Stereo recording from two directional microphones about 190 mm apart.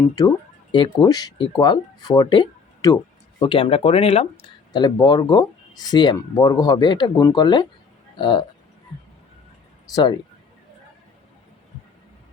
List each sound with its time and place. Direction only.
0.2 s speech: 20° left (ahead or behind)
9.9 s speech: 20° left (ahead or behind)